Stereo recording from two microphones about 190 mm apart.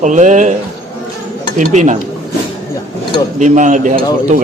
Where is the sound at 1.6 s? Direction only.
40° right (ahead or behind).